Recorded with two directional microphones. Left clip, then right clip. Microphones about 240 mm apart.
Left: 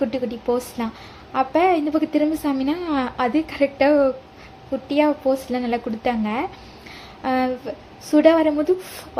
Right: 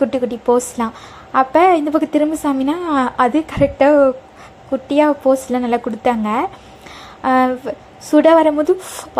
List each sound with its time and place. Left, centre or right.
0.0 s a woman's voice: right